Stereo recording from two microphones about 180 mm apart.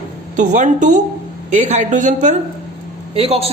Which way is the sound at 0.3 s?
45° right (ahead or behind).